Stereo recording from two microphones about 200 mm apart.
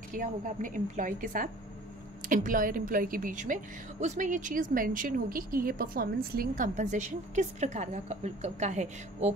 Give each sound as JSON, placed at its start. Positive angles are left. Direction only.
{"t": 0.1, "sound": "a woman's voice", "side_deg": -40}